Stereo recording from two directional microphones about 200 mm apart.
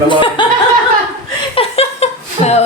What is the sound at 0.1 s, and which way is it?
Chuckle, 25° left (ahead or behind).